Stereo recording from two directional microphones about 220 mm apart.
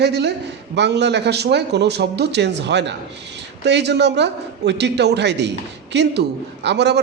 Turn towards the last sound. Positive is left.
turn(degrees=-50)  # may be behind; listen again after turning